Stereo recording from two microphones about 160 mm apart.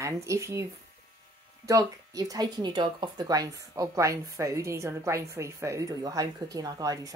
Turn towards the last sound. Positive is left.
turn(degrees=-20)  # may be behind; listen again after turning